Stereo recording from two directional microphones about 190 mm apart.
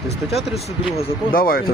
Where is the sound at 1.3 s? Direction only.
50° left (ahead or behind).